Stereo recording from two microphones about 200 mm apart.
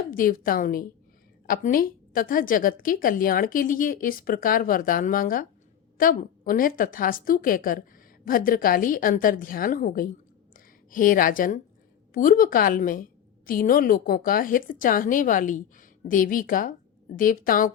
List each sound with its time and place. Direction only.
0.1 s a woman's voice: 45° left (ahead or behind)